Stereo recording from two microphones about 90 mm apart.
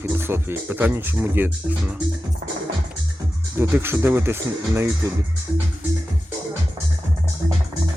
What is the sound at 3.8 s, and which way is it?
Speech, 25° right (ahead or behind).